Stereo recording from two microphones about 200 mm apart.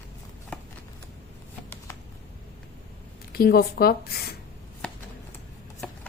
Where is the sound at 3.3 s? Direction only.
50° left (ahead or behind).